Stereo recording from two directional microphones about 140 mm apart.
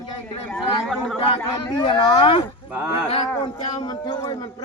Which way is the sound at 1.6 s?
30° left (ahead or behind).